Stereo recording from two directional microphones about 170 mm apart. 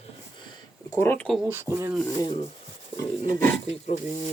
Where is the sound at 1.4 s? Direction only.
15° right (ahead or behind).